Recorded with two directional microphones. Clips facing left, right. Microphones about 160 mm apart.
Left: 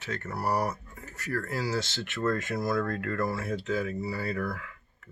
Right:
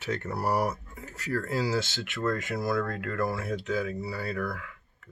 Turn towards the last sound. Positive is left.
turn(degrees=0)  # may be behind; listen again after turning